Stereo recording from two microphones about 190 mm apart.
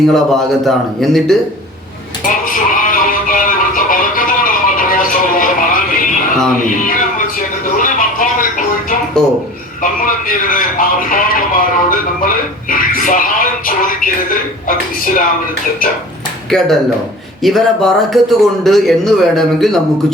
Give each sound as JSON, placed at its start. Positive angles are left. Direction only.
{"t": 0.1, "sound": "a man's voice", "side_deg": 0}
{"t": 2.2, "sound": "music", "side_deg": 45}
{"t": 9.8, "sound": "a sound", "side_deg": 45}
{"t": 16.5, "sound": "a man's voice", "side_deg": 0}